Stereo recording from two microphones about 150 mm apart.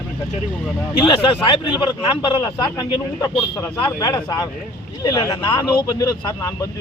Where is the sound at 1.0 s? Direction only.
30° left (ahead or behind).